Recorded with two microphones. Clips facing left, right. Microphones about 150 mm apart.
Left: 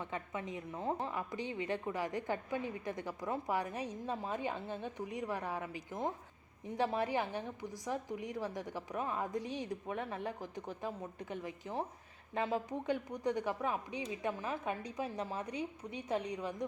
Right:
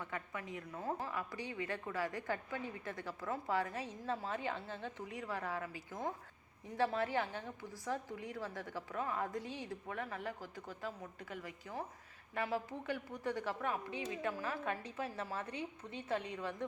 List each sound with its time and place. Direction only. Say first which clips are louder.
0.0 s a woman's voice: left 3 dB; 20° left (ahead or behind)